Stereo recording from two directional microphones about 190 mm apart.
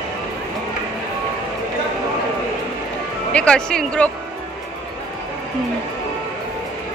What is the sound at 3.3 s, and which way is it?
Speech, 5° left (ahead or behind).